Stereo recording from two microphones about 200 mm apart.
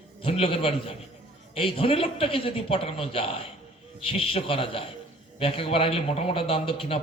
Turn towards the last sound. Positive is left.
turn(degrees=25)  # may be behind; listen again after turning